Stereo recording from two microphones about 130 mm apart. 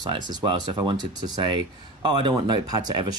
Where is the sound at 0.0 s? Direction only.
35° right (ahead or behind).